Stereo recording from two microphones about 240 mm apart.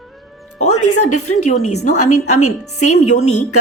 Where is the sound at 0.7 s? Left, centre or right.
Left.